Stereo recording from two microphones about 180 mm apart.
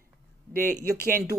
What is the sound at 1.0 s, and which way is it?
Speech, 55° right (ahead or behind).